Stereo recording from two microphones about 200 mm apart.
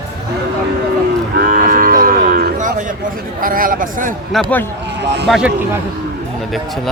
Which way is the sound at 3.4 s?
45° right (ahead or behind).